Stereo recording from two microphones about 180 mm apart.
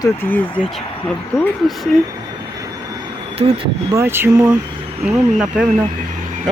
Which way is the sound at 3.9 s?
15° right (ahead or behind).